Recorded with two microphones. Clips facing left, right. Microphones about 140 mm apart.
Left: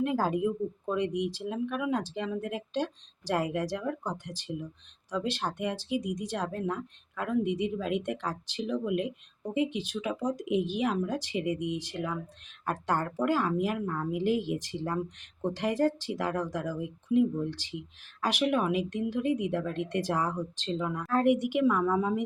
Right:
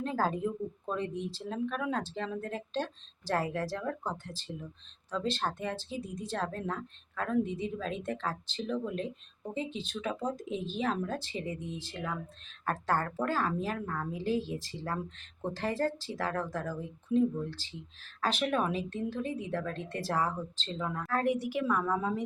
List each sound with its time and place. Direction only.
0.0 s a woman's voice: 15° left (ahead or behind)